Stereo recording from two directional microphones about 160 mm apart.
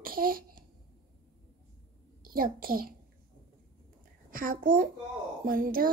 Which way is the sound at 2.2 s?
65° right (ahead or behind).